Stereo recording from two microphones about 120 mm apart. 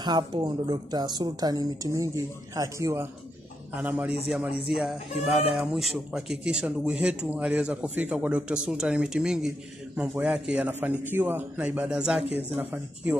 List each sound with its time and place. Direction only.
0.0 s a woman's voice: 35° right (ahead or behind)
3.7 s a man's voice: 15° right (ahead or behind)